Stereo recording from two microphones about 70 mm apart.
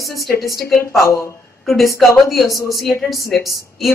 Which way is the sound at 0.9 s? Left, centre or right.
Left.